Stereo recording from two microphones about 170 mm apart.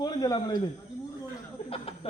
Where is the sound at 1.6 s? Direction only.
35° left (ahead or behind).